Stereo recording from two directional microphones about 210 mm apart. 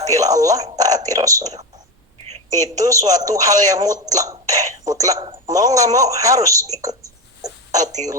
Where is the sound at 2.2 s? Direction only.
30° right (ahead or behind).